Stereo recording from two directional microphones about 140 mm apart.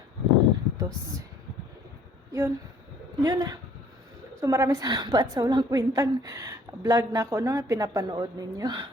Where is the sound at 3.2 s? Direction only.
25° right (ahead or behind).